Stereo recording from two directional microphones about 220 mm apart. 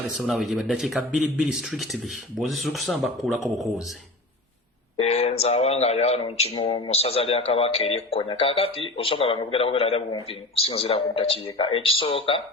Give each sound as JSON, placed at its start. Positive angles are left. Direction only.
{"t": 0.2, "sound": "speech", "side_deg": 0}
{"t": 4.9, "sound": "speech", "side_deg": 30}